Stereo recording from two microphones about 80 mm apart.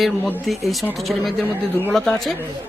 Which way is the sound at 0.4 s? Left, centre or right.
Centre.